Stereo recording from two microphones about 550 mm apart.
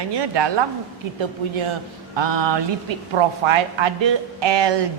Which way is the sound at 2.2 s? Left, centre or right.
Right.